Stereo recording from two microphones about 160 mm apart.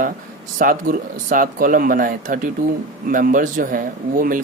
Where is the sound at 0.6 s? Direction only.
60° right (ahead or behind).